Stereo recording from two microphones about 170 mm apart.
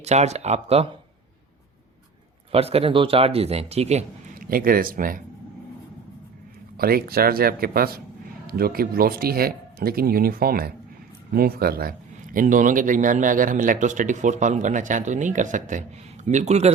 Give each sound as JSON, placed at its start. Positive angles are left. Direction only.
{"t": 0.0, "sound": "speech", "side_deg": -40}
{"t": 2.5, "sound": "speech", "side_deg": -35}
{"t": 4.4, "sound": "speech", "side_deg": -60}
{"t": 6.7, "sound": "a man's voice", "side_deg": -60}